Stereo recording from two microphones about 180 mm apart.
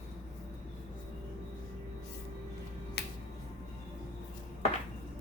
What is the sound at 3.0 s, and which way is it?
Music, 60° left (ahead or behind).